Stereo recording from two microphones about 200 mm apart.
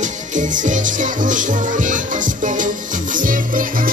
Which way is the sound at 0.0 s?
40° right (ahead or behind).